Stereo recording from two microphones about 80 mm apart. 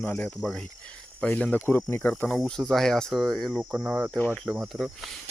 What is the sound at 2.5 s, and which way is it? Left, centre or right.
Speech, centre.